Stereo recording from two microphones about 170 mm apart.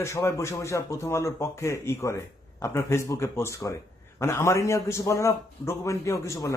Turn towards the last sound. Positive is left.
turn(degrees=15)  # may be behind; listen again after turning